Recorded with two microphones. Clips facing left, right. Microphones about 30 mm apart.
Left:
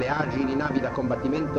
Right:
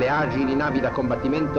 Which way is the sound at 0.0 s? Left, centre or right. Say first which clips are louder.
Right 4 dB; right.